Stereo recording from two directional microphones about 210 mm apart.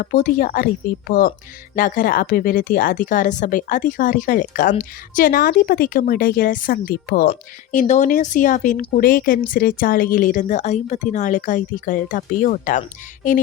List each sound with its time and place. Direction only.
0.0 s speech: 40° left (ahead or behind)
7.3 s speech: 35° left (ahead or behind)